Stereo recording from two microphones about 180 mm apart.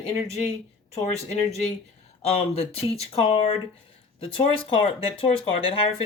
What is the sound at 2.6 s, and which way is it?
Speech, 35° left (ahead or behind).